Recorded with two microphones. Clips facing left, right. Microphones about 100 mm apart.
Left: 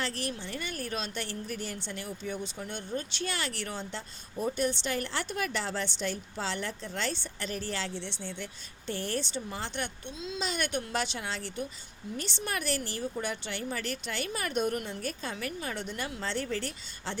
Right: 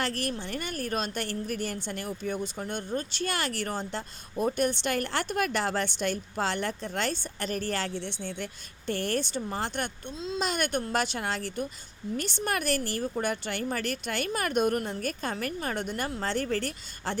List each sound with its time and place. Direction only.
0.0 s speech: 55° right (ahead or behind)
4.4 s speech: 55° right (ahead or behind)